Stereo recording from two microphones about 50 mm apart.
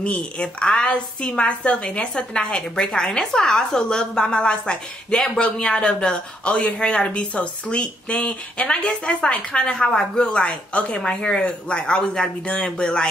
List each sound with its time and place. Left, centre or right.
0.0 s a woman's voice: left